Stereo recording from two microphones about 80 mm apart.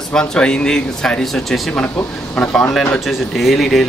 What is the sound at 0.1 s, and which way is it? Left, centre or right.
Speech, centre.